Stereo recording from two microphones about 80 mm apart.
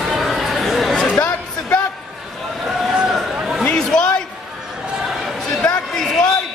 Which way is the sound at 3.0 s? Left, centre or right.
Centre.